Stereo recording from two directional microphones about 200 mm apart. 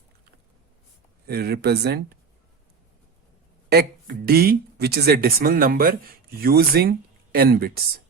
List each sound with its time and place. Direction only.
1.3 s speech: 50° right (ahead or behind)
3.7 s speech: 50° right (ahead or behind)